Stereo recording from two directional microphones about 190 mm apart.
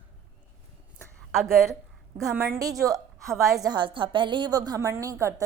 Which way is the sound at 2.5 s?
20° right (ahead or behind).